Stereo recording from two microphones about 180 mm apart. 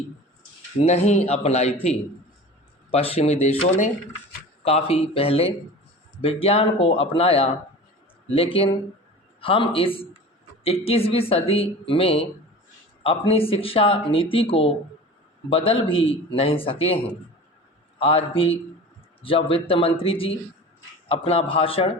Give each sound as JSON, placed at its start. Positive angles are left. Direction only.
{"t": 0.9, "sound": "speech", "side_deg": 40}
{"t": 18.0, "sound": "speech", "side_deg": 30}